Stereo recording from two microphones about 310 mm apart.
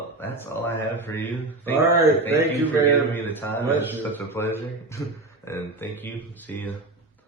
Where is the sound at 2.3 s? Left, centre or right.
Centre.